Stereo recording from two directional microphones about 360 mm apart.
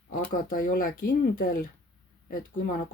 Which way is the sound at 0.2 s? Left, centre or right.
Left.